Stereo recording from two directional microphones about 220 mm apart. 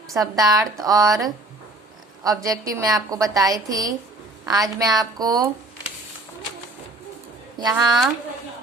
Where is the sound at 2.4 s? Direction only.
15° right (ahead or behind).